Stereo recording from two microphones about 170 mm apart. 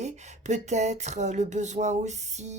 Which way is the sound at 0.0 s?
40° right (ahead or behind).